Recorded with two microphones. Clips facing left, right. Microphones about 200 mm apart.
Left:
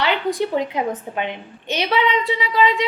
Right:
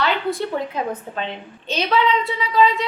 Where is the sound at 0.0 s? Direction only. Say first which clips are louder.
Left 1 dB; 15° left (ahead or behind).